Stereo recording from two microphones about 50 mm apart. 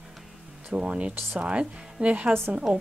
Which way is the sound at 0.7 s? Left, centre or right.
Right.